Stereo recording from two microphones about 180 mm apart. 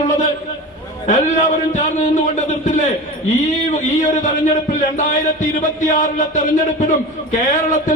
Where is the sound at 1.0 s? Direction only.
45° left (ahead or behind).